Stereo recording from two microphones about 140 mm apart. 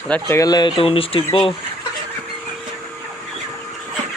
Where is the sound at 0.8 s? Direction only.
40° left (ahead or behind).